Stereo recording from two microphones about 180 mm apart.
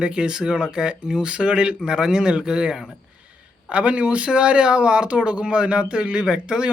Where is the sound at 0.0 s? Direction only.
5° right (ahead or behind).